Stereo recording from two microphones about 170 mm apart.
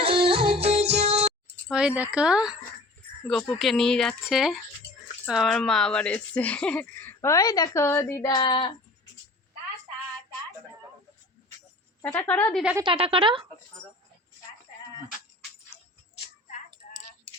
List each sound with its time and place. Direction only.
0.0 s music: 30° right (ahead or behind)
1.6 s speech: 5° right (ahead or behind)
3.6 s speech: centre (ahead or behind); by 8.4 s 15° left (ahead or behind)
8.4 s a sound: 30° left (ahead or behind)
12.0 s speech: 10° left (ahead or behind)
12.8 s speech: 30° right (ahead or behind)